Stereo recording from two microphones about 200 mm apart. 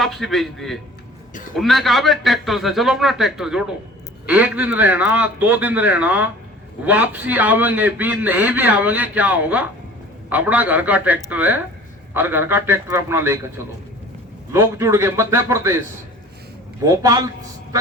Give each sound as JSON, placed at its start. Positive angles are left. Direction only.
{"t": 0.0, "sound": "a man's voice", "side_deg": 0}
{"t": 14.5, "sound": "a man's voice", "side_deg": -15}
{"t": 16.8, "sound": "a man's voice", "side_deg": -15}